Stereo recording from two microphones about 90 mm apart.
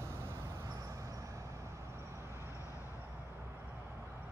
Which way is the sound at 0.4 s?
45° right (ahead or behind).